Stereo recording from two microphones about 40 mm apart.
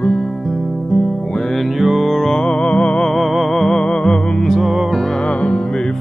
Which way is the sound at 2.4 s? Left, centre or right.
Left.